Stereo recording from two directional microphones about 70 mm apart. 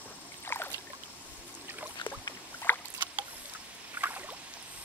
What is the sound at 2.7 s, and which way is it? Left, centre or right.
Rowboat, left.